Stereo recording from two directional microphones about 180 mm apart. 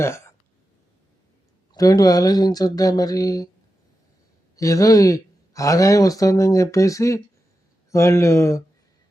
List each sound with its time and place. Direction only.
0.0 s speech: 15° left (ahead or behind)
1.7 s speech: 20° left (ahead or behind)
4.5 s speech: 20° left (ahead or behind)